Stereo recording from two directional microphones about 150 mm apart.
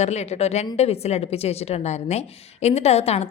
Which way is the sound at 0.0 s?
45° left (ahead or behind).